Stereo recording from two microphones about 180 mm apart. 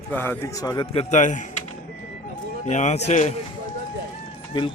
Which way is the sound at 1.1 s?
45° left (ahead or behind).